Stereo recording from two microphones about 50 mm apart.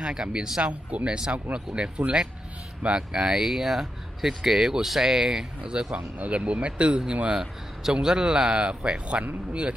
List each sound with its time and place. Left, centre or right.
0.0 s speech: centre
3.3 s speech: centre
5.9 s speech: right